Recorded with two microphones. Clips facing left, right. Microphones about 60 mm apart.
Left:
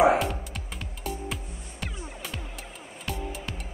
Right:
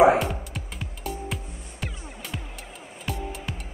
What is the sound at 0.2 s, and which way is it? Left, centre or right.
Music, centre.